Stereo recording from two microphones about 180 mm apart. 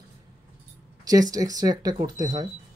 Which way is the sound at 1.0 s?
20° right (ahead or behind).